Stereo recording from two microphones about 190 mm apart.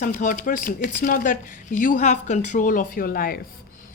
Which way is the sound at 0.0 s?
45° left (ahead or behind).